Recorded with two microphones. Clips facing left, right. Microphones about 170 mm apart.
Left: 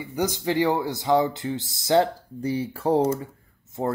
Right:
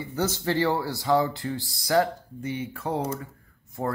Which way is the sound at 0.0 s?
15° left (ahead or behind).